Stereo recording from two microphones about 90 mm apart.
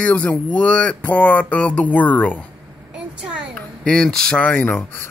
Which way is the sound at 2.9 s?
10° right (ahead or behind).